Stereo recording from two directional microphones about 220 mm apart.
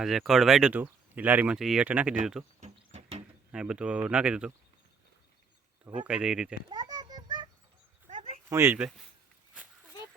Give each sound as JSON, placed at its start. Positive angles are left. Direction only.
{"t": 0.0, "sound": "speech", "side_deg": 0}
{"t": 2.6, "sound": "a sound", "side_deg": -30}
{"t": 3.5, "sound": "speech", "side_deg": -5}
{"t": 5.8, "sound": "speech", "side_deg": -5}
{"t": 6.7, "sound": "music", "side_deg": -20}
{"t": 8.0, "sound": "a sound", "side_deg": -30}
{"t": 8.4, "sound": "speech", "side_deg": -10}